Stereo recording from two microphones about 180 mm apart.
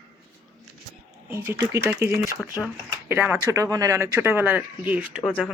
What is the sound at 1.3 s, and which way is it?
Speech, 15° right (ahead or behind).